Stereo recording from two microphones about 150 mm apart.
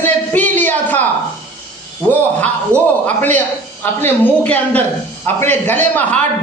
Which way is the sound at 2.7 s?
15° right (ahead or behind).